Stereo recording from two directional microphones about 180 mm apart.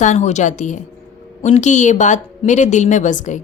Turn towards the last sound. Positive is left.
turn(degrees=45)  # may be behind; listen again after turning